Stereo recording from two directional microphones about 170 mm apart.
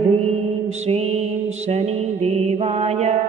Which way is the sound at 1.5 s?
40° right (ahead or behind).